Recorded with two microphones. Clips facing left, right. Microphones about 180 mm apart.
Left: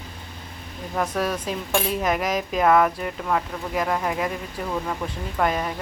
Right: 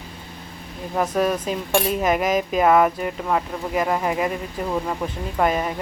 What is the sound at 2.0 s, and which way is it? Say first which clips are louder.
Speech: right 4 dB; 5° right (ahead or behind).